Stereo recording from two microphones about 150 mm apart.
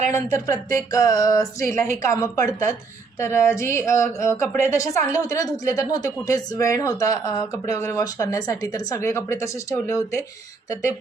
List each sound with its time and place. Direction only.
0.1 s speech: 20° left (ahead or behind)